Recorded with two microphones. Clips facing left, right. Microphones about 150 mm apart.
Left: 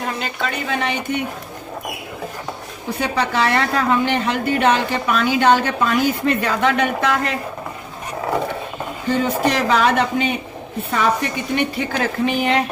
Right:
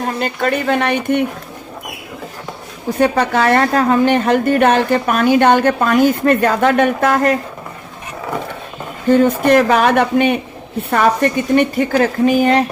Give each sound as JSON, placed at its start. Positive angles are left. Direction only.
{"t": 0.0, "sound": "a woman's voice", "side_deg": -50}
{"t": 3.0, "sound": "a woman's voice", "side_deg": -50}
{"t": 9.0, "sound": "a woman's voice", "side_deg": -50}